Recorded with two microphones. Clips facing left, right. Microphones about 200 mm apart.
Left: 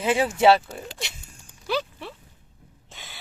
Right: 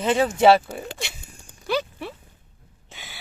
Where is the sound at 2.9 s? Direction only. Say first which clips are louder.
Right 2 dB; 5° right (ahead or behind).